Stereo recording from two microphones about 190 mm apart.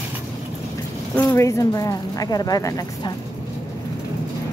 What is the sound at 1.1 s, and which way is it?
Speech, 10° left (ahead or behind).